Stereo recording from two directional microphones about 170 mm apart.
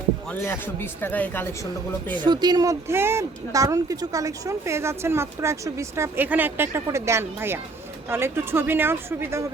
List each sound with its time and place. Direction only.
0.3 s speech: 15° left (ahead or behind)
2.1 s speech: 25° right (ahead or behind)